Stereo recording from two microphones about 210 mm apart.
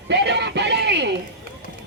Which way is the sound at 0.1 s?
55° right (ahead or behind).